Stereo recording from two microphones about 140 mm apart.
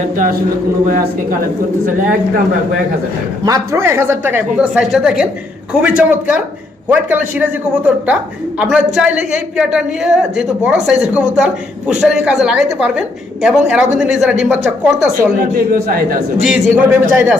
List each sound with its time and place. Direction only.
3.4 s a man's voice: 25° right (ahead or behind); by 15.1 s 5° right (ahead or behind)
15.5 s a man's voice: 90° right
16.4 s a man's voice: 10° right (ahead or behind)